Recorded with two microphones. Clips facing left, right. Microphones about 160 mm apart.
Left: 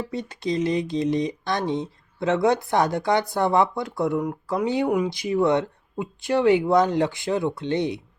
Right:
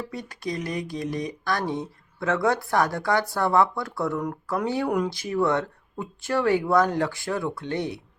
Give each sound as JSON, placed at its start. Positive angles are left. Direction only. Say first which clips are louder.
{"t": 0.1, "sound": "speech", "louder": "left 5 dB", "side_deg": 25}